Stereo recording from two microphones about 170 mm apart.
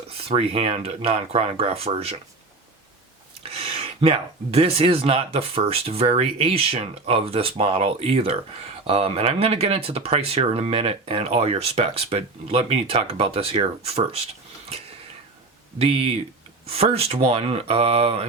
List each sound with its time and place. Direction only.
0.1 s speech: 35° right (ahead or behind)
3.4 s speech: 35° right (ahead or behind)
15.8 s speech: 35° right (ahead or behind)